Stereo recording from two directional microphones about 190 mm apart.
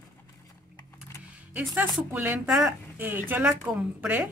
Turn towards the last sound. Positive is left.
turn(degrees=-5)  # may be behind; listen again after turning